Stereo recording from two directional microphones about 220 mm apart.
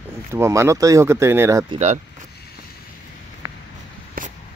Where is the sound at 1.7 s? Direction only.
30° right (ahead or behind).